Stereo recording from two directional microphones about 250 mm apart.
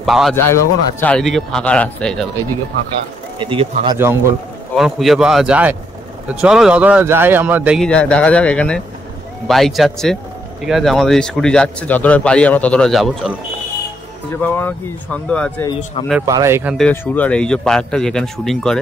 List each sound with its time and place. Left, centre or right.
0.0 s speech: centre
3.3 s speech: centre
14.3 s speech: centre
16.2 s speech: centre
16.7 s speech: centre